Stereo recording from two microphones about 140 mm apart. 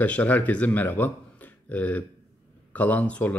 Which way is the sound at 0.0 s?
10° left (ahead or behind).